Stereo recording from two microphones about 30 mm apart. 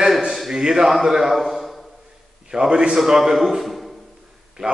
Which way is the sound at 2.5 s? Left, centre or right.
Right.